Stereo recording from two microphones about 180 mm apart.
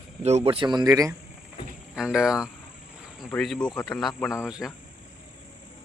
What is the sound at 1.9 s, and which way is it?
Speech, 5° right (ahead or behind).